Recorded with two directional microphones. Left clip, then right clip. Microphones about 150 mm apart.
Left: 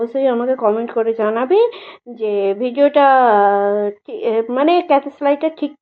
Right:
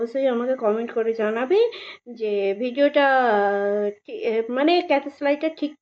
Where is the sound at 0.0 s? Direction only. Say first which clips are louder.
Left 6 dB; 10° right (ahead or behind).